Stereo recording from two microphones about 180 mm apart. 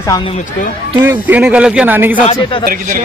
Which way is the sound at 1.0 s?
10° right (ahead or behind).